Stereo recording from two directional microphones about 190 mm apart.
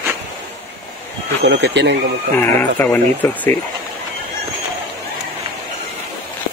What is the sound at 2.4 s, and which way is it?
Speech, 10° left (ahead or behind).